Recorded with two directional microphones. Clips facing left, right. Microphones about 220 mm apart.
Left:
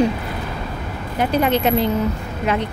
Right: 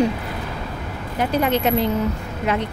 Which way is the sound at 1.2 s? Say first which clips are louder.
Left 2 dB; 25° left (ahead or behind).